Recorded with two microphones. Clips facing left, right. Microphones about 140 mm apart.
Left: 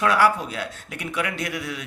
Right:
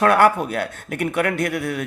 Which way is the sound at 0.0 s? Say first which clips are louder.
Right 4 dB; 55° right (ahead or behind).